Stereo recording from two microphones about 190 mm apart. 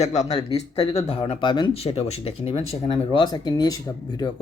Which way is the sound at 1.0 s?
30° left (ahead or behind).